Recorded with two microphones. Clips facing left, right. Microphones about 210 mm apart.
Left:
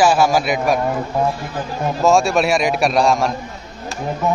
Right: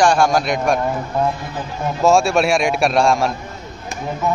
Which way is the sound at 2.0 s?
Centre (ahead or behind).